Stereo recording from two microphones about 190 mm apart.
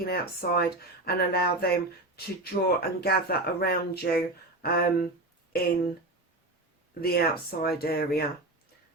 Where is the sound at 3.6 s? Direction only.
55° left (ahead or behind).